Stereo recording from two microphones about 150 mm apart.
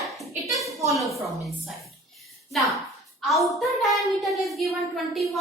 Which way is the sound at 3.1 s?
Centre (ahead or behind).